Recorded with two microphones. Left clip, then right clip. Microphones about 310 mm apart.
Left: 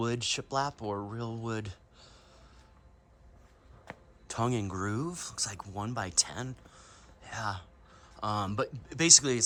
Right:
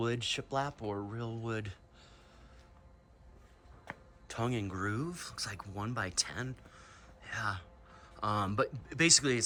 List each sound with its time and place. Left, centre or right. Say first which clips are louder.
0.0 s speech: left 2 dB; centre
3.9 s music: right 1 dB; centre
4.3 s speech: left 4 dB; centre